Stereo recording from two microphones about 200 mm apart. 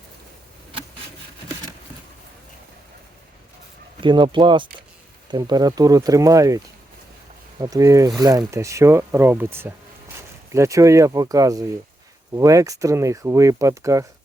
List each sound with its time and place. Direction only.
4.0 s speech: 25° right (ahead or behind)
7.6 s speech: 15° right (ahead or behind)